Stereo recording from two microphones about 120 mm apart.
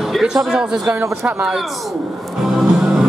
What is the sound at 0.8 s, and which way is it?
Speech, 25° right (ahead or behind).